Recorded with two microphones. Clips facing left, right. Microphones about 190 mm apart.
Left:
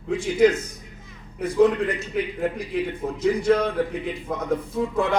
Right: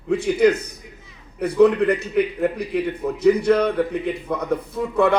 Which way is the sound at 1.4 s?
65° right (ahead or behind).